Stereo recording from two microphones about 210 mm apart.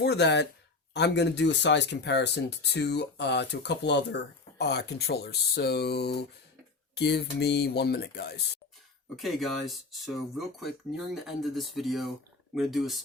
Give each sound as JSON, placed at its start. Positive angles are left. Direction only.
{"t": 0.0, "sound": "speech", "side_deg": 55}
{"t": 9.1, "sound": "speech", "side_deg": 0}